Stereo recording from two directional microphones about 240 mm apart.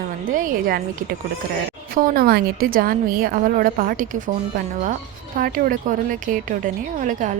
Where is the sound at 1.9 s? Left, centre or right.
Right.